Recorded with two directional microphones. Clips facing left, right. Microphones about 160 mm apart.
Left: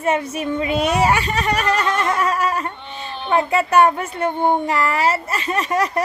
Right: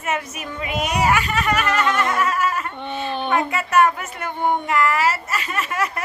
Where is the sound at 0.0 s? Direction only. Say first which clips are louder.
Left 6 dB; 30° left (ahead or behind).